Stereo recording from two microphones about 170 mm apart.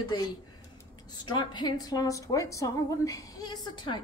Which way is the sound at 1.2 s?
25° left (ahead or behind).